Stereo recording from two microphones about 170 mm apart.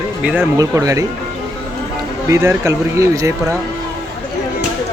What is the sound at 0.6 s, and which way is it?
Speech, 20° right (ahead or behind).